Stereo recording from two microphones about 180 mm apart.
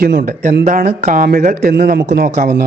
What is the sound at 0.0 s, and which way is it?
Speech, 55° right (ahead or behind).